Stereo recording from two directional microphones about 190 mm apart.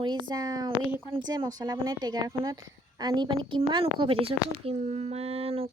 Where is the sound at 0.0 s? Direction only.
25° right (ahead or behind).